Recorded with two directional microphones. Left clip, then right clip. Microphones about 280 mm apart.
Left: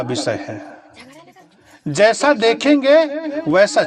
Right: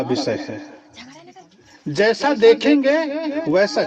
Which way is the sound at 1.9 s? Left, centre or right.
Left.